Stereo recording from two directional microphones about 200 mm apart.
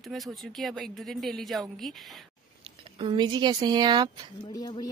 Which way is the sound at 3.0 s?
25° right (ahead or behind).